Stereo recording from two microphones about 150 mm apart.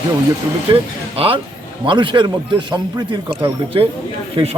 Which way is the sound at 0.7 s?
40° right (ahead or behind).